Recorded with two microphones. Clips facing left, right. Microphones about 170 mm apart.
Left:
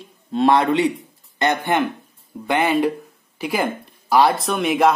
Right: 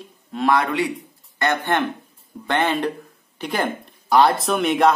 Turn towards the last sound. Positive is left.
turn(degrees=0)  # may be behind; listen again after turning